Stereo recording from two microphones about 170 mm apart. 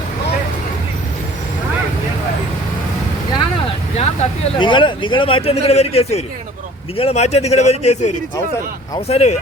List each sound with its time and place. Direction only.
3.9 s speech: 35° left (ahead or behind)